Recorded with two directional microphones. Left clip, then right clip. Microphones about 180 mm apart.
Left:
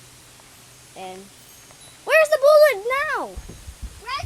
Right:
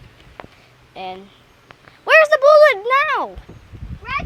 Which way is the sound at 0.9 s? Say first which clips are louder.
Right 6 dB; 25° right (ahead or behind).